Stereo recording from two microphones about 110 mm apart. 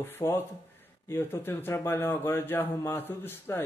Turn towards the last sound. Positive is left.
turn(degrees=20)  # may be behind; listen again after turning